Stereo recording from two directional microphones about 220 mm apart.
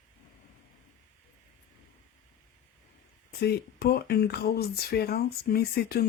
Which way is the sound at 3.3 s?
45° left (ahead or behind).